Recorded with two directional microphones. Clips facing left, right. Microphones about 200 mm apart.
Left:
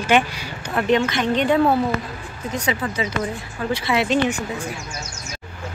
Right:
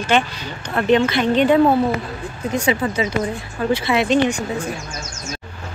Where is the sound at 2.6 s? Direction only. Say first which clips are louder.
Right 4 dB; 25° right (ahead or behind).